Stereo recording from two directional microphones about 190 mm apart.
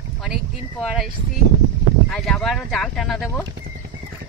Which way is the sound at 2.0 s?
5° left (ahead or behind).